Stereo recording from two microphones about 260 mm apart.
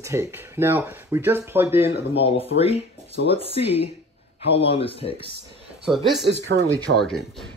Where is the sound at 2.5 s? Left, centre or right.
Left.